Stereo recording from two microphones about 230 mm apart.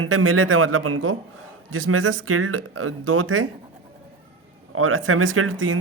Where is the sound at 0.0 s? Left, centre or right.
Right.